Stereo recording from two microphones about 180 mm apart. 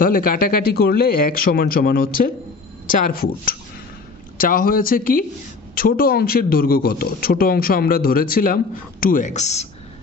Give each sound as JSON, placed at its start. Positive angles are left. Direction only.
{"t": 0.0, "sound": "speech", "side_deg": 50}